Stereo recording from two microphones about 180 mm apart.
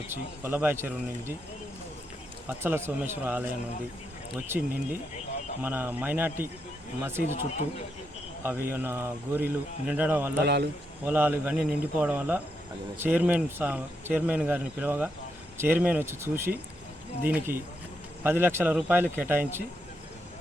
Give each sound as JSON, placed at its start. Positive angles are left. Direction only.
{"t": 0.1, "sound": "speech", "side_deg": -10}
{"t": 2.5, "sound": "speech", "side_deg": -15}
{"t": 7.2, "sound": "speech", "side_deg": 40}
{"t": 8.4, "sound": "speech", "side_deg": -15}
{"t": 10.4, "sound": "a man's voice", "side_deg": -65}
{"t": 11.0, "sound": "speech", "side_deg": -10}